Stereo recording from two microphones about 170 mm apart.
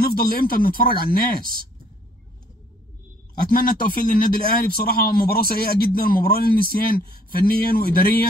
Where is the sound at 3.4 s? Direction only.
60° left (ahead or behind).